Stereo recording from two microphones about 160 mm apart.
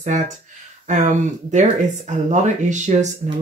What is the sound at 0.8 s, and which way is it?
Speech, 50° right (ahead or behind).